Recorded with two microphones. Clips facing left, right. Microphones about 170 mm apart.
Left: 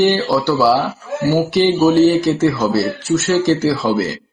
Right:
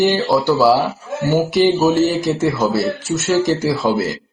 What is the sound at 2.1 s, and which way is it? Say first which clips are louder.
Speech: left 3 dB; 20° right (ahead or behind).